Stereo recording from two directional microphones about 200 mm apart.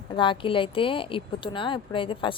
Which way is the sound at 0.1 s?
25° left (ahead or behind).